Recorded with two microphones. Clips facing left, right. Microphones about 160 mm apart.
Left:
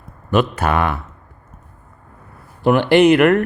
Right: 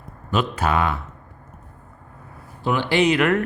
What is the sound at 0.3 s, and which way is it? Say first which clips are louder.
Speech: left 5 dB; 60° left (ahead or behind).